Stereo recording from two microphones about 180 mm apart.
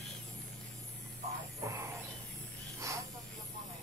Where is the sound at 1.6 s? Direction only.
15° right (ahead or behind).